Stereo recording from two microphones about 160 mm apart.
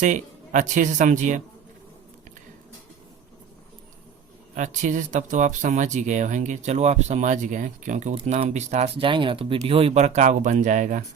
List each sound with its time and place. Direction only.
0.0 s speech: 50° right (ahead or behind)
4.5 s speech: 50° right (ahead or behind)